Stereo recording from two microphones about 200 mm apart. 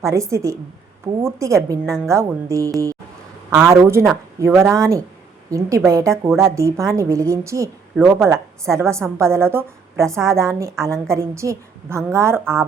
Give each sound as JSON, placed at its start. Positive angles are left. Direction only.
{"t": 0.0, "sound": "a woman's voice", "side_deg": -15}
{"t": 8.7, "sound": "a woman's voice", "side_deg": -15}